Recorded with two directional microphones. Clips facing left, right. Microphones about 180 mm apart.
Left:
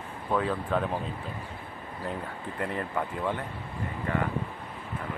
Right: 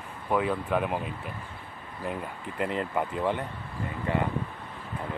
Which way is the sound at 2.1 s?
20° right (ahead or behind).